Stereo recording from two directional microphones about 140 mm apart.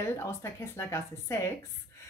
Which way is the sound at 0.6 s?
20° left (ahead or behind).